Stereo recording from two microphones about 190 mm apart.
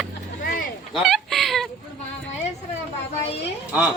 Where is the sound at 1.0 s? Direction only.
Centre (ahead or behind).